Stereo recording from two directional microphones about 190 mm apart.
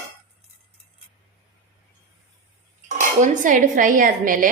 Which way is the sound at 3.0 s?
40° right (ahead or behind).